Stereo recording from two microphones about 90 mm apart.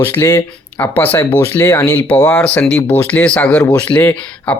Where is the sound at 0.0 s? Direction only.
30° left (ahead or behind).